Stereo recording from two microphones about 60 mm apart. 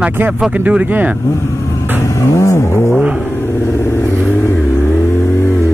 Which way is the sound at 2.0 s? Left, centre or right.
Left.